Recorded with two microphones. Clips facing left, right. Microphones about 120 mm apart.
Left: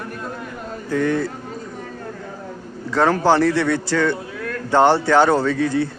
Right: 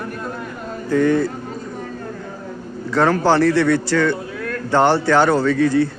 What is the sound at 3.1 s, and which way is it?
A man's voice, 15° left (ahead or behind).